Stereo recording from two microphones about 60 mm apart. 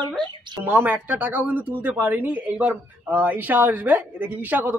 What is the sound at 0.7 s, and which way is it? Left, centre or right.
A man's voice, right.